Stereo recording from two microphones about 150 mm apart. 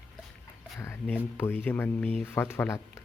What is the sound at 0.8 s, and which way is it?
Speech, 15° left (ahead or behind).